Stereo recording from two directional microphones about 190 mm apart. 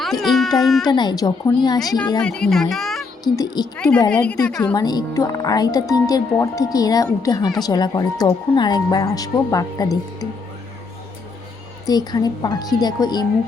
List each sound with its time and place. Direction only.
0.0 s speech: centre (ahead or behind)
0.9 s speech: 20° left (ahead or behind)
2.2 s a child's voice: 5° left (ahead or behind)
3.3 s speech: 20° left (ahead or behind)
3.8 s a woman's voice: 5° left (ahead or behind)
4.7 s speech: 20° left (ahead or behind)
11.9 s speech: 20° left (ahead or behind)